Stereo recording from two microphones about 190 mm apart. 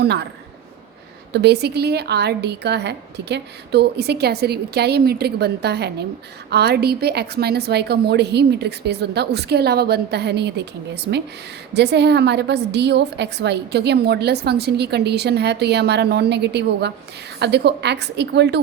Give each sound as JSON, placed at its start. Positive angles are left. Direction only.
{"t": 0.0, "sound": "a woman's voice", "side_deg": -60}
{"t": 1.3, "sound": "a woman's voice", "side_deg": -60}